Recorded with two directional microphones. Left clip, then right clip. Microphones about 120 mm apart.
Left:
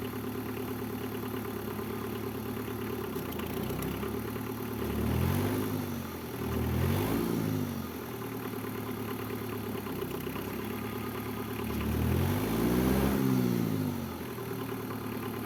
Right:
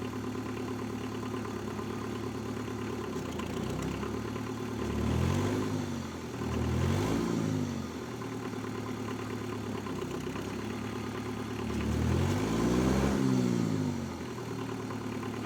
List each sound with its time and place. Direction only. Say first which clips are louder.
7.0 s vehicle: even; 55° left (ahead or behind)
12.2 s vehicle: even; 60° left (ahead or behind)